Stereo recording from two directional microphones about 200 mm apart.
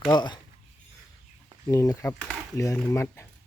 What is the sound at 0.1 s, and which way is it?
Speech, 20° left (ahead or behind).